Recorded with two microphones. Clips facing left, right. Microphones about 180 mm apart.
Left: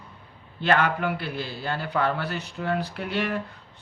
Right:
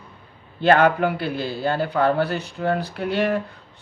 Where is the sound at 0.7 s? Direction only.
35° right (ahead or behind).